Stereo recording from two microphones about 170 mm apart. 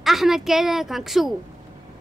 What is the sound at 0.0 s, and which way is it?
A woman's voice, centre (ahead or behind).